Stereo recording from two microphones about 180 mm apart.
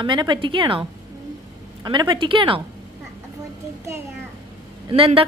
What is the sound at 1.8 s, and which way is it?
Speech, 25° right (ahead or behind).